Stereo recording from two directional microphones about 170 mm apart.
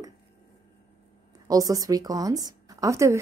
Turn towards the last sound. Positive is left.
turn(degrees=-15)  # may be behind; listen again after turning